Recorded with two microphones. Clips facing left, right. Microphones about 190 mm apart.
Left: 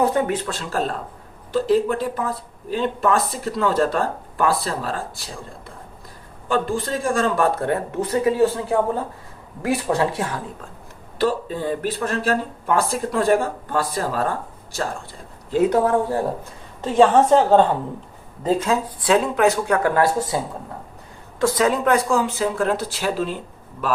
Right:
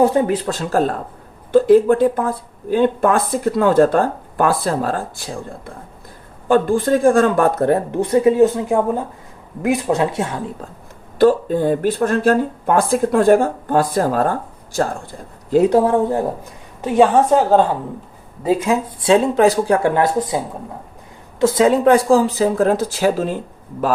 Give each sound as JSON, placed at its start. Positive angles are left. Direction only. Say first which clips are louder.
{"t": 0.0, "sound": "speech", "louder": "right 5 dB", "side_deg": -30}
{"t": 0.6, "sound": "speech", "louder": "right 7 dB", "side_deg": -45}
{"t": 6.5, "sound": "speech", "louder": "right 8 dB", "side_deg": -55}
{"t": 7.6, "sound": "speech", "louder": "right 6 dB", "side_deg": -35}
{"t": 11.2, "sound": "speech", "louder": "right 8 dB", "side_deg": -50}
{"t": 15.4, "sound": "speech", "louder": "right 4 dB", "side_deg": -35}
{"t": 16.8, "sound": "a woman's voice", "louder": "right 2 dB", "side_deg": -10}
{"t": 18.9, "sound": "speech", "louder": "right 6 dB", "side_deg": -25}
{"t": 21.4, "sound": "speech", "louder": "right 6 dB", "side_deg": -25}